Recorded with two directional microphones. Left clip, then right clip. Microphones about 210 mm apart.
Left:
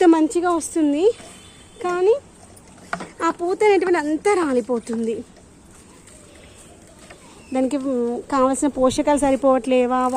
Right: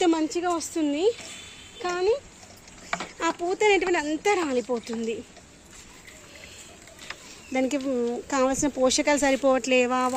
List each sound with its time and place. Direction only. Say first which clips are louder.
0.0 s a sound: left 8 dB; 25° left (ahead or behind)
0.3 s speech: left 7 dB; 20° left (ahead or behind)
7.5 s speech: left 4 dB; centre (ahead or behind)